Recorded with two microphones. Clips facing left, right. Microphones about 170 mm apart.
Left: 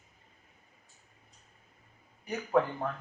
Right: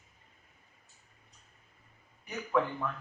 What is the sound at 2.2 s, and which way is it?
Speech, 40° left (ahead or behind).